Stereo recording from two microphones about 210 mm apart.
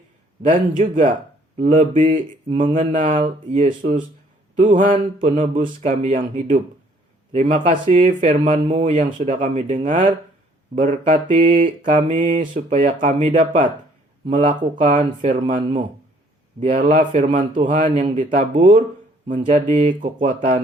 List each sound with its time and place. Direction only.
0.5 s mantra: 40° right (ahead or behind)